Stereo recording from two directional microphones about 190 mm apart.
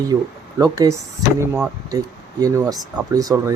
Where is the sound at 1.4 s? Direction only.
5° right (ahead or behind).